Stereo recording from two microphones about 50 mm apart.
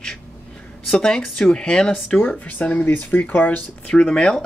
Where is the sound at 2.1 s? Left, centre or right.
Left.